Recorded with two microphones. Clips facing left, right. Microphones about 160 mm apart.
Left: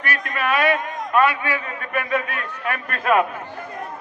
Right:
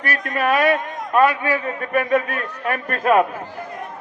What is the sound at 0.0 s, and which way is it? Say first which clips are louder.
A man's voice: right 3 dB; 40° right (ahead or behind).